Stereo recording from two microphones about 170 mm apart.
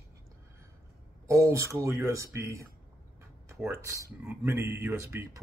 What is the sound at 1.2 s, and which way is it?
Speech, 20° right (ahead or behind).